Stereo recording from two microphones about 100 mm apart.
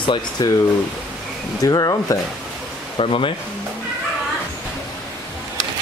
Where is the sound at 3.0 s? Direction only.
60° left (ahead or behind).